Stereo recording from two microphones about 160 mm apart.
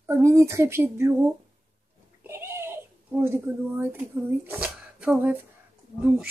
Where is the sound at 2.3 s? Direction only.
15° right (ahead or behind).